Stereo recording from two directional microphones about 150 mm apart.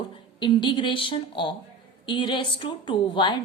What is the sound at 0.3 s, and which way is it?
A woman's voice, 30° left (ahead or behind).